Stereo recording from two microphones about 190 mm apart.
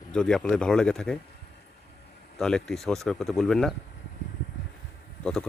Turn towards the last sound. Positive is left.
turn(degrees=5)  # may be behind; listen again after turning